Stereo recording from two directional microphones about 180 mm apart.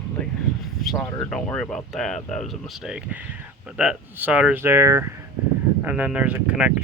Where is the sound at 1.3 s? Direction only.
5° left (ahead or behind).